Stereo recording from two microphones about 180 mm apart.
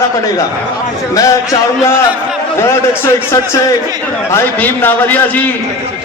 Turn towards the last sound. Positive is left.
turn(degrees=10)  # may be behind; listen again after turning